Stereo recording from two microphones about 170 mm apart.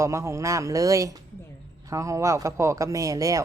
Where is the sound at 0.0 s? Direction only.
15° right (ahead or behind).